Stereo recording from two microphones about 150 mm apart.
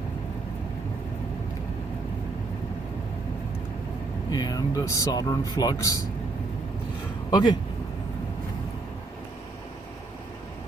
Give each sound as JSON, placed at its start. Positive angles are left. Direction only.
{"t": 4.3, "sound": "speech", "side_deg": 25}
{"t": 7.2, "sound": "speech", "side_deg": 25}